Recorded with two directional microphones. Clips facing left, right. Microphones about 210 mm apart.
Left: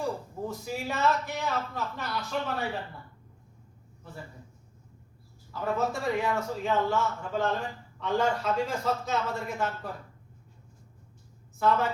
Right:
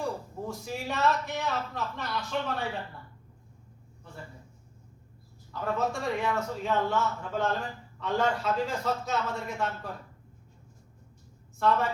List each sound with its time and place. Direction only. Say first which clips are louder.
0.0 s a man's voice: left 1 dB; centre (ahead or behind)
5.5 s a man's voice: left 1 dB; 5° left (ahead or behind)